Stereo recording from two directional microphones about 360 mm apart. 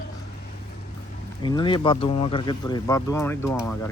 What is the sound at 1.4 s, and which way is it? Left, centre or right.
Speech, centre.